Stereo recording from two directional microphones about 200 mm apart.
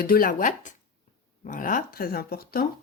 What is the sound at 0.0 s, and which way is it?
Speech, 45° left (ahead or behind).